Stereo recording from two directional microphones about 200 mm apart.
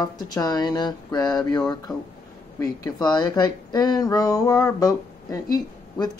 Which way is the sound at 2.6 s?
20° left (ahead or behind).